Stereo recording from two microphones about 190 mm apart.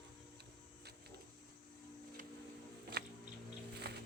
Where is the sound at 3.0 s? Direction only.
55° right (ahead or behind).